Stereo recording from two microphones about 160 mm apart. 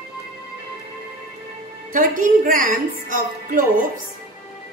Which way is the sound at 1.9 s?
60° right (ahead or behind).